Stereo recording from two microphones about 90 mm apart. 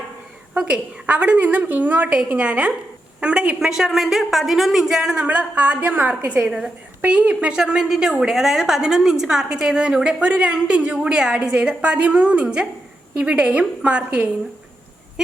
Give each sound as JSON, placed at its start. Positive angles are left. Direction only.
{"t": 0.5, "sound": "a woman's voice", "side_deg": -15}